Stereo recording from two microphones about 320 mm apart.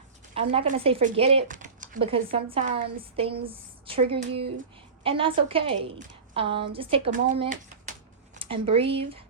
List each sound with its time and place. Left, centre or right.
0.3 s speech: centre